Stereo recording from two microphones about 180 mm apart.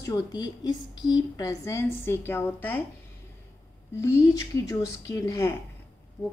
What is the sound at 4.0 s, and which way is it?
Speech, 15° left (ahead or behind).